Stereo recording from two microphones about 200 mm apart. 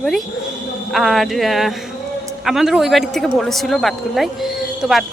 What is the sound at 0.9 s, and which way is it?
A woman's voice, centre (ahead or behind).